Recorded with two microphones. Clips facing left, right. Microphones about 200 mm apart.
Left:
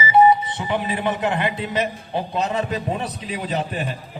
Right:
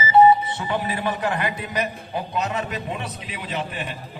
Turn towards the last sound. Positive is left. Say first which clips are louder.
# left 4 dB
turn(degrees=40)  # may be behind; listen again after turning